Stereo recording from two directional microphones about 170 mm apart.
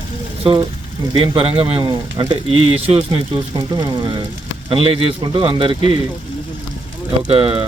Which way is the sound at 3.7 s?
25° right (ahead or behind).